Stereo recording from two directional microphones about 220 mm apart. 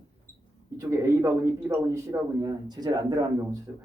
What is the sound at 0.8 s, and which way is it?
A man's voice, 10° right (ahead or behind).